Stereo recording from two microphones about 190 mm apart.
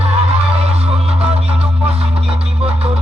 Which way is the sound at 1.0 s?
30° right (ahead or behind).